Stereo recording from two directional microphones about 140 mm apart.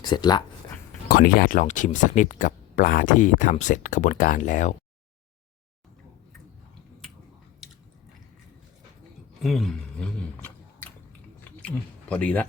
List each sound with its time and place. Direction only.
0.0 s speech: 30° left (ahead or behind)
1.0 s speech: 90° left; by 4.7 s 60° left (ahead or behind)
9.4 s a sound: centre (ahead or behind)
11.6 s speech: 10° left (ahead or behind)